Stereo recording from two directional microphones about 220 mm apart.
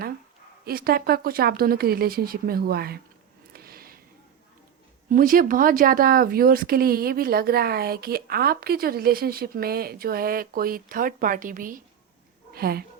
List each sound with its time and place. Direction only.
0.6 s speech: 40° right (ahead or behind)
3.5 s a sound: 45° right (ahead or behind)
5.0 s speech: 40° right (ahead or behind)